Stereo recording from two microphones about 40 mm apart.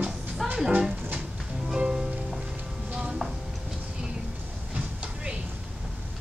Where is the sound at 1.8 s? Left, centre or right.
Centre.